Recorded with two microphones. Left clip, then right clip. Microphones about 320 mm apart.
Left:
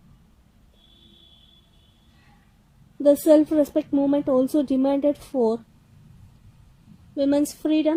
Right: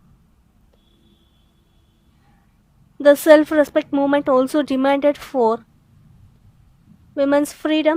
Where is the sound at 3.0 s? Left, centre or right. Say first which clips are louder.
Right 5 dB; right.